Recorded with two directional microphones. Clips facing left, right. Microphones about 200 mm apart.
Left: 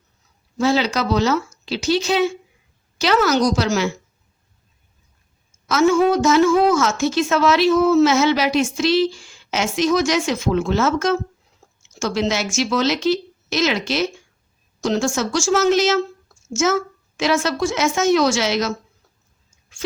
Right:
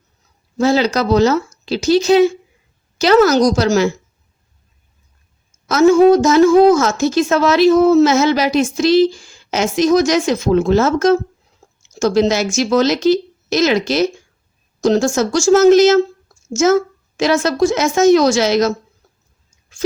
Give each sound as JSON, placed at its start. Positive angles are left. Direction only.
{"t": 0.6, "sound": "a woman's voice", "side_deg": -40}
{"t": 5.6, "sound": "a woman's voice", "side_deg": -40}